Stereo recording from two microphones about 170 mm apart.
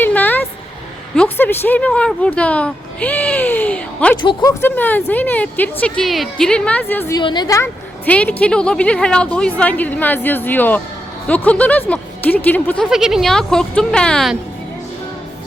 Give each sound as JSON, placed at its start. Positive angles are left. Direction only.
{"t": 0.0, "sound": "a sound", "side_deg": 10}
{"t": 1.1, "sound": "speech", "side_deg": 10}
{"t": 4.2, "sound": "speech", "side_deg": 25}
{"t": 4.6, "sound": "a woman's voice", "side_deg": 10}
{"t": 7.2, "sound": "a woman's voice", "side_deg": 25}